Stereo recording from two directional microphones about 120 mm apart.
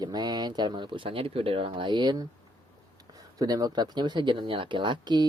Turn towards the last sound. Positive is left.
turn(degrees=-35)  # may be behind; listen again after turning